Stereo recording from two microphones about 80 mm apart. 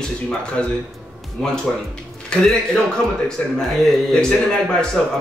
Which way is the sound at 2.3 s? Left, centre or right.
Centre.